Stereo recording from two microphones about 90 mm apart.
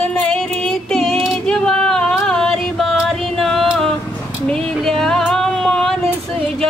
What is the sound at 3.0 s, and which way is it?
Music, 5° left (ahead or behind).